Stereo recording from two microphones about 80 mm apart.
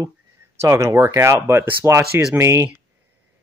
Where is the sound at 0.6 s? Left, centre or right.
Right.